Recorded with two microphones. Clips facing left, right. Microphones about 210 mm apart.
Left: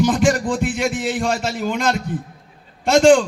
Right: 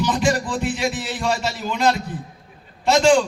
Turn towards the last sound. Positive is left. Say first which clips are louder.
# left 3 dB
turn(degrees=50)  # may be behind; listen again after turning